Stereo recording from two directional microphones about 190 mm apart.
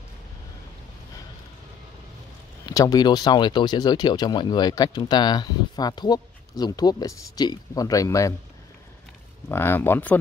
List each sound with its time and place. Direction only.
2.6 s speech: 20° left (ahead or behind)
9.5 s speech: 10° left (ahead or behind)